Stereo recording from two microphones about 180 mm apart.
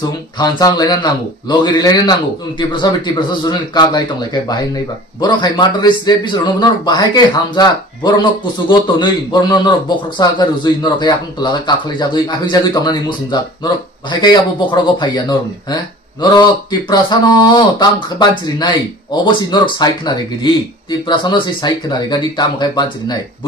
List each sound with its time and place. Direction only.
0.4 s speech: 20° left (ahead or behind)